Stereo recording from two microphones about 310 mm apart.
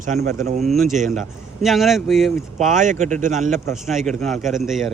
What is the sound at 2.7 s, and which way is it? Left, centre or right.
Speech, right.